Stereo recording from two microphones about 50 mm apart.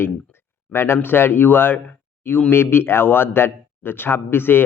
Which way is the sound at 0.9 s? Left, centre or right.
Left.